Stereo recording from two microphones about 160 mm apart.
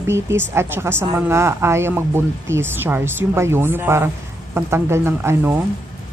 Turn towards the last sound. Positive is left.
turn(degrees=-15)  # may be behind; listen again after turning